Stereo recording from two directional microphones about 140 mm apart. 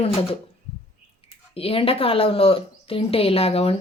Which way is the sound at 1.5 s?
40° left (ahead or behind).